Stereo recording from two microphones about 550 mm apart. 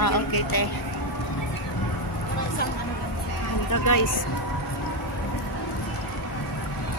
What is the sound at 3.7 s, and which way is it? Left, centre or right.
Speech, left.